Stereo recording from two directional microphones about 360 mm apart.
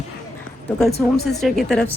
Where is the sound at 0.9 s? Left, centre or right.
Left.